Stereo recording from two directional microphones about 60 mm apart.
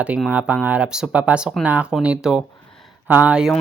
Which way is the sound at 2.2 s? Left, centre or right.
Centre.